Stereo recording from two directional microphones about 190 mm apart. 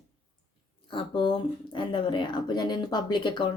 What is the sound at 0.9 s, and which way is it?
Speech, 25° left (ahead or behind).